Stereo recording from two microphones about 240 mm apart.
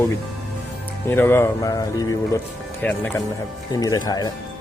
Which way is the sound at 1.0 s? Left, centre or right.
Centre.